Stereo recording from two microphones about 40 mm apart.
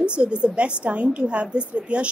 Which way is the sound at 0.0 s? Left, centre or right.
Right.